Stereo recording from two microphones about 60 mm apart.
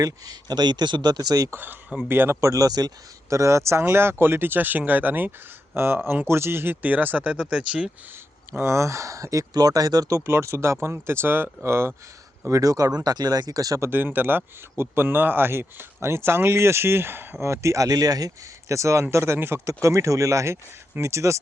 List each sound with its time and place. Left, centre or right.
1.2 s speech: right
2.0 s speech: right
2.4 s speech: right
6.8 s speech: right
8.5 s speech: right
12.5 s speech: right
13.9 s speech: right
17.4 s speech: right
17.8 s speech: right
18.7 s speech: right
19.1 s speech: right
19.6 s speech: right